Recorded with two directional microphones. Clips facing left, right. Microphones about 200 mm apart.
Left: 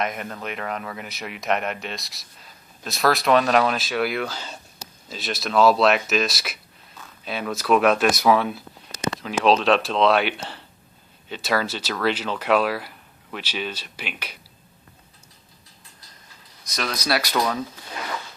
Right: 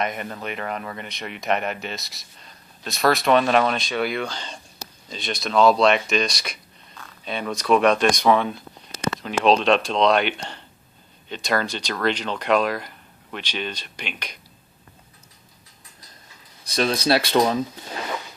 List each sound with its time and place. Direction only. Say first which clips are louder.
0.0 s speech: right 1 dB; centre (ahead or behind)
16.6 s speech: right 6 dB; 30° right (ahead or behind)